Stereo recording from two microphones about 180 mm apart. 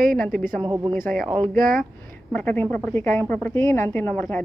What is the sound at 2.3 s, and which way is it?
A woman's voice, 10° left (ahead or behind).